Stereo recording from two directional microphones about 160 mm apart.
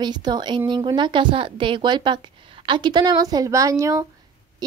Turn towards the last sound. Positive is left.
turn(degrees=-20)  # may be behind; listen again after turning